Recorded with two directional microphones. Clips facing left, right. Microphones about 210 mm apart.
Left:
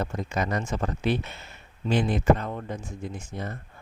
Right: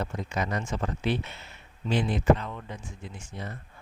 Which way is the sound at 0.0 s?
45° left (ahead or behind).